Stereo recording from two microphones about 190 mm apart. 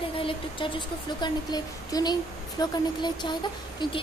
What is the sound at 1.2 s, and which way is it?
Speech, 20° left (ahead or behind).